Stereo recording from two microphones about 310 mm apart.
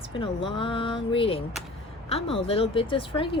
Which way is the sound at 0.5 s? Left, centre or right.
Centre.